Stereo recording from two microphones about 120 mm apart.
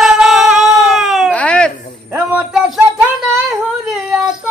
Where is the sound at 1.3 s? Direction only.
10° left (ahead or behind).